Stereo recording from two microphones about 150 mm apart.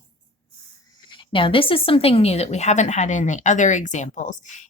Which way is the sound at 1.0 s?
35° left (ahead or behind).